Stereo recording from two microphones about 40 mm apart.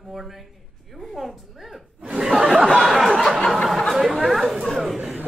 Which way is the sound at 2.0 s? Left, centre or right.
Centre.